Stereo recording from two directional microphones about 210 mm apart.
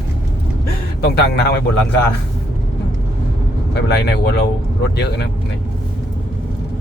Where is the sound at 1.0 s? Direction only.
50° left (ahead or behind).